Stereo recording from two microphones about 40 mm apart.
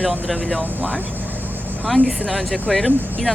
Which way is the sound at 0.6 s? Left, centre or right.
Right.